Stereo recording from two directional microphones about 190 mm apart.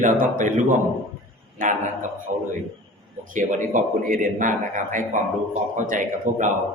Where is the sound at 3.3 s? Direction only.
45° right (ahead or behind).